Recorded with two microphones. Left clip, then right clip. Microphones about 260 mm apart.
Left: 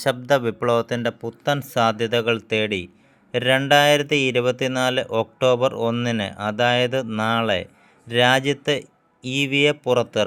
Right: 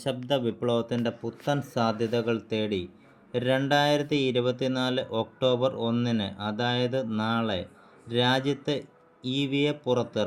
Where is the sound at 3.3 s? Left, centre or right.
Left.